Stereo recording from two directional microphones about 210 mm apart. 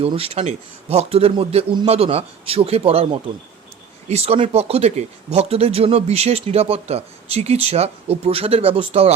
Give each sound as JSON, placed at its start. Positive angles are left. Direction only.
{"t": 0.0, "sound": "speech", "side_deg": -30}